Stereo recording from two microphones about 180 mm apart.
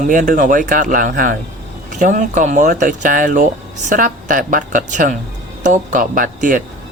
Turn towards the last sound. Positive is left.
turn(degrees=-50)  # may be behind; listen again after turning